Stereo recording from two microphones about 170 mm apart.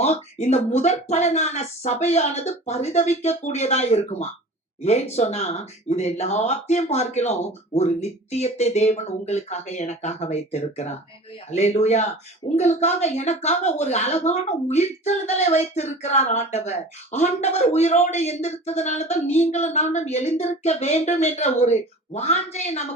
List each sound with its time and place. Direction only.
0.0 s a woman's voice: 40° left (ahead or behind)